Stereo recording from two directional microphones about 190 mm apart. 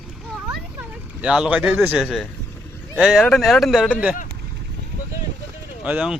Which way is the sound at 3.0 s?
Centre (ahead or behind).